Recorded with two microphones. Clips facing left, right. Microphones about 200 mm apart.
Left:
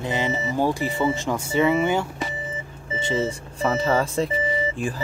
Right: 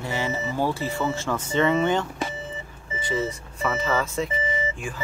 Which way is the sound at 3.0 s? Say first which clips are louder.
Left 3 dB; 25° left (ahead or behind).